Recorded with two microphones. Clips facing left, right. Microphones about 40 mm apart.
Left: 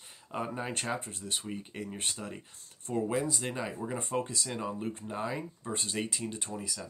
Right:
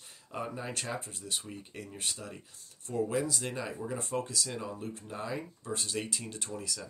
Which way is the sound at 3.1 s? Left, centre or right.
Centre.